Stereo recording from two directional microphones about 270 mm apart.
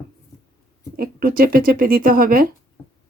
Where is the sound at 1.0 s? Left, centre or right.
Right.